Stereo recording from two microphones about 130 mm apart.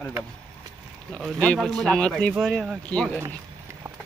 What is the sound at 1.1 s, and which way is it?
A man's voice, 5° left (ahead or behind).